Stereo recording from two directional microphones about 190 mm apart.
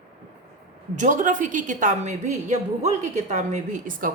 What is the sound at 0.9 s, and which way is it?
A woman's voice, 40° right (ahead or behind).